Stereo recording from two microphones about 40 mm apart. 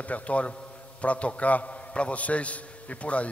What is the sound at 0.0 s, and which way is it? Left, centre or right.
A man's voice, left.